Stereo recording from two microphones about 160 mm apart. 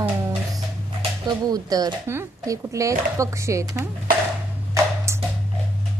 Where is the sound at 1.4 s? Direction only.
25° right (ahead or behind).